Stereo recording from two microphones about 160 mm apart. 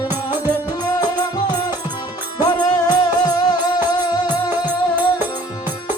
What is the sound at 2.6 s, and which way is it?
Music, 25° left (ahead or behind).